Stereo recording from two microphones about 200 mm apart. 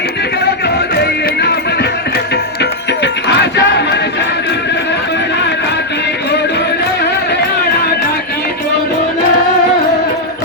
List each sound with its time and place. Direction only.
0.6 s music: 55° left (ahead or behind)